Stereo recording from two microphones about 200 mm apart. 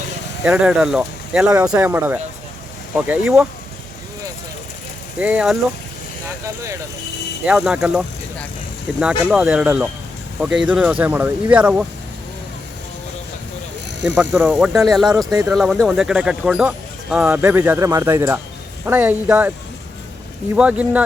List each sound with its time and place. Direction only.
0.4 s speech: 5° right (ahead or behind)
5.2 s speech: 5° right (ahead or behind)
7.4 s speech: 5° right (ahead or behind)
14.2 s speech: 5° right (ahead or behind)
15.3 s speech: 15° right (ahead or behind)
15.5 s speech: centre (ahead or behind)
20.6 s speech: 5° right (ahead or behind)